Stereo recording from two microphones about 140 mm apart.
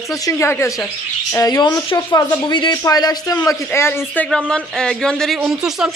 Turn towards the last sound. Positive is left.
turn(degrees=-5)  # may be behind; listen again after turning